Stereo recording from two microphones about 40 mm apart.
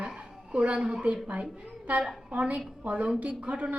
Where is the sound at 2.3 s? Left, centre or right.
Right.